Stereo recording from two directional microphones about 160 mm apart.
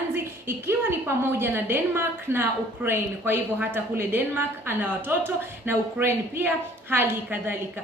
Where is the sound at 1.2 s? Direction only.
15° right (ahead or behind).